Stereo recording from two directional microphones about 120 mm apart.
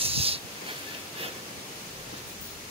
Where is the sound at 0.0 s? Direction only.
55° right (ahead or behind).